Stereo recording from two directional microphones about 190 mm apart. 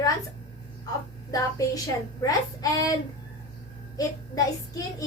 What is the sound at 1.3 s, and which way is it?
A woman's voice, 20° left (ahead or behind).